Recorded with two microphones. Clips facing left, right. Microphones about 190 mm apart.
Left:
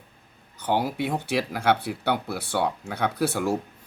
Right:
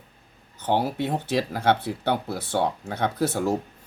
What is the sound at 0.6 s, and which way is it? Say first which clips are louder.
Speech: right 1 dB; 15° left (ahead or behind).